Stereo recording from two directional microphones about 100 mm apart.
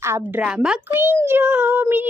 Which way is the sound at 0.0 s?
25° right (ahead or behind).